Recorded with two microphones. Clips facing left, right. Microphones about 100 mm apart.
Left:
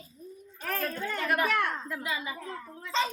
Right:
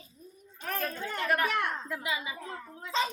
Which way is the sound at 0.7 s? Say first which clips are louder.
Left 2 dB; 20° right (ahead or behind).